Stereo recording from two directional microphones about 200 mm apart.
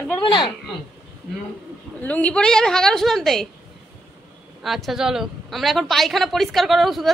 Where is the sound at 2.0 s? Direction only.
5° left (ahead or behind).